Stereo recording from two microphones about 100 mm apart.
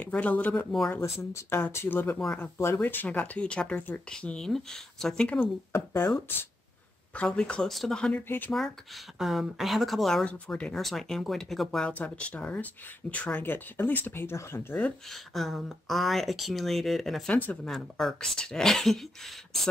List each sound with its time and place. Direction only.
0.0 s speech: 15° left (ahead or behind)
0.7 s speech: 5° left (ahead or behind)
1.3 s speech: 25° left (ahead or behind); by 5.5 s 10° left (ahead or behind)
5.7 s speech: 20° left (ahead or behind)
7.2 s speech: 10° left (ahead or behind)
9.2 s speech: 5° right (ahead or behind)
11.9 s speech: 15° left (ahead or behind)
15.0 s speech: centre (ahead or behind)